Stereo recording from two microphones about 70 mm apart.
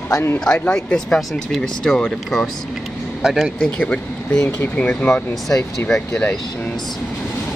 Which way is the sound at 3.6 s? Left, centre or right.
Centre.